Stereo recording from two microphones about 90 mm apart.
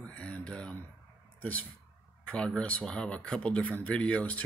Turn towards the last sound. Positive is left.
turn(degrees=15)  # may be behind; listen again after turning